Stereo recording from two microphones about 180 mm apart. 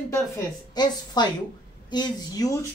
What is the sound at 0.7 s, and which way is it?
Speech, 25° left (ahead or behind).